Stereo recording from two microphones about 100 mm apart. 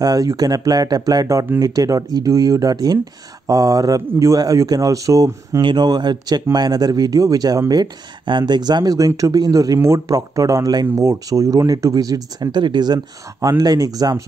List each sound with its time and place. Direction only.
0.0 s speech: 35° right (ahead or behind)
5.6 s speech: 50° right (ahead or behind)